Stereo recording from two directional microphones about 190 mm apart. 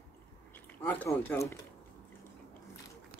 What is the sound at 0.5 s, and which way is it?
Speech, 10° left (ahead or behind).